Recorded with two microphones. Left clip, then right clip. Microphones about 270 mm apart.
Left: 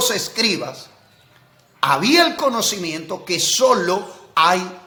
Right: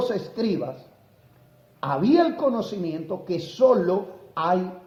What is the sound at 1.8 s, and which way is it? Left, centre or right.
A man's voice, left.